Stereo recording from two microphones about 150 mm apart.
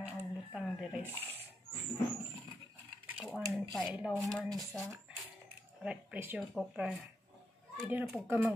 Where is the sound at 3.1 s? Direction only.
10° right (ahead or behind).